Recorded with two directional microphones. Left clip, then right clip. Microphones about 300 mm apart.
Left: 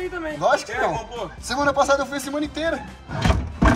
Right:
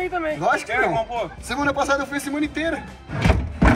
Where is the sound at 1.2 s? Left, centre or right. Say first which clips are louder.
Left 1 dB; centre.